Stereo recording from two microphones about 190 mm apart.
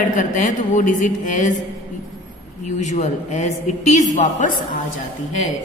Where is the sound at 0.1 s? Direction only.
40° left (ahead or behind).